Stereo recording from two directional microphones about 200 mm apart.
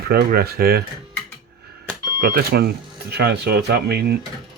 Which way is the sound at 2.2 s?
50° right (ahead or behind).